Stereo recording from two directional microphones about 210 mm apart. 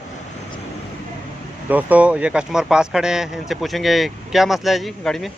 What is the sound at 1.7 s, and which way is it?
Speech, 10° right (ahead or behind).